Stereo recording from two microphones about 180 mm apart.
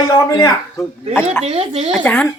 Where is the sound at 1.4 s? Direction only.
35° right (ahead or behind).